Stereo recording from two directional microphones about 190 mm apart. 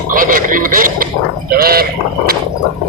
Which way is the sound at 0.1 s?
45° right (ahead or behind).